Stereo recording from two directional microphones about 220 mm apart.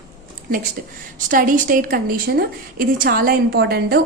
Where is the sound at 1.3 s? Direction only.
35° right (ahead or behind).